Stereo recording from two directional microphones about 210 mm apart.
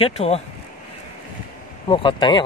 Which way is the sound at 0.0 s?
30° left (ahead or behind).